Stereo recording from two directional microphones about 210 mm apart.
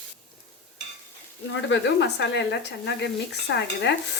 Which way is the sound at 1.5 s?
60° left (ahead or behind).